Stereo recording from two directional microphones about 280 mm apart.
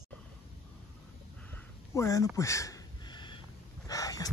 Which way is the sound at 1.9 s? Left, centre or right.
Centre.